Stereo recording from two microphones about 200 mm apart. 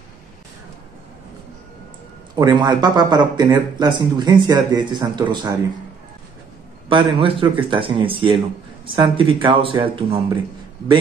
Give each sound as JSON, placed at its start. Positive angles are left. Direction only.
{"t": 2.3, "sound": "speech", "side_deg": -20}
{"t": 6.9, "sound": "speech", "side_deg": -25}